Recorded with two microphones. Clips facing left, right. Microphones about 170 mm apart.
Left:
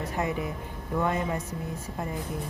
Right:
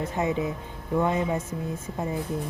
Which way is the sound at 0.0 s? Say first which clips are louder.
Right 3 dB; 20° right (ahead or behind).